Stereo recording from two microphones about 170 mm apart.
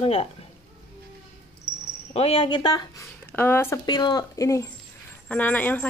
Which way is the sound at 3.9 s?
25° left (ahead or behind).